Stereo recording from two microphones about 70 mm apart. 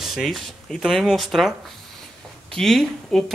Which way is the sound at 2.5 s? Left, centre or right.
Centre.